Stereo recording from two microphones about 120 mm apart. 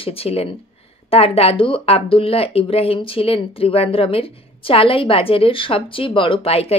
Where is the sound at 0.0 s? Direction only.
55° left (ahead or behind).